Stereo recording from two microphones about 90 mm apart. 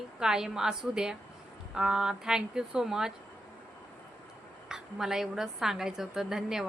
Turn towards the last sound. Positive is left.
turn(degrees=-5)  # may be behind; listen again after turning